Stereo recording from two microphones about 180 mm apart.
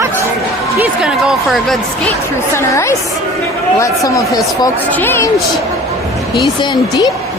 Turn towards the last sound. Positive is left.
turn(degrees=20)  # may be behind; listen again after turning